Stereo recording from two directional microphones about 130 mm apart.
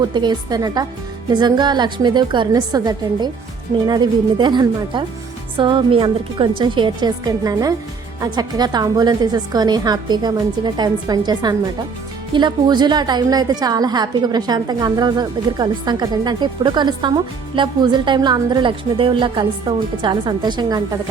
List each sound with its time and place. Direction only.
0.0 s a woman's voice: 35° right (ahead or behind)